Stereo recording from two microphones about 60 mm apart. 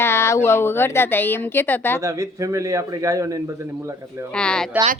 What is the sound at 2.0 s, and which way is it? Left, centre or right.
Speech, right.